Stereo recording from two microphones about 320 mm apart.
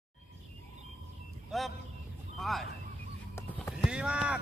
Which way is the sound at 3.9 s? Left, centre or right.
Centre.